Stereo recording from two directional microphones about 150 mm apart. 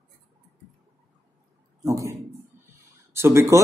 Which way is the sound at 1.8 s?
20° right (ahead or behind).